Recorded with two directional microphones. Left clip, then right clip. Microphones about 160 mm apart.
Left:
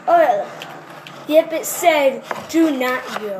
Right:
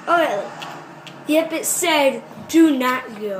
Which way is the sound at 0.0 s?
45° right (ahead or behind).